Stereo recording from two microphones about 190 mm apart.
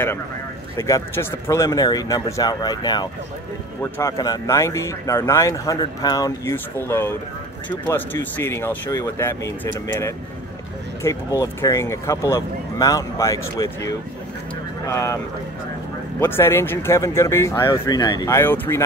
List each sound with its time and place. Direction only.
0.7 s speech: 15° left (ahead or behind)
16.2 s speech: 10° left (ahead or behind)